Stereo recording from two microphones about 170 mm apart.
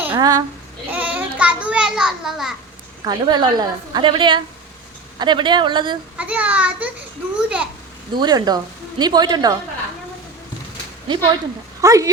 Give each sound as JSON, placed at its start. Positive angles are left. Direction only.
{"t": 0.2, "sound": "a woman's voice", "side_deg": -25}
{"t": 0.9, "sound": "a child's voice", "side_deg": -10}
{"t": 3.0, "sound": "a woman's voice", "side_deg": -25}
{"t": 6.1, "sound": "a child's voice", "side_deg": -10}
{"t": 8.1, "sound": "a woman's voice", "side_deg": -25}
{"t": 11.1, "sound": "a woman's voice", "side_deg": -25}